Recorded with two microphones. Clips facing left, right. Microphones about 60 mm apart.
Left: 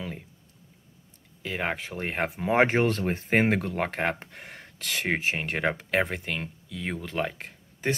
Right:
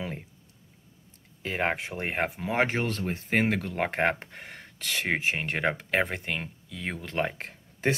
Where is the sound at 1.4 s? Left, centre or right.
Right.